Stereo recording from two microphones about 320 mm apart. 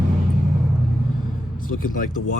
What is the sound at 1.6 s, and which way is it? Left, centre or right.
Speech, left.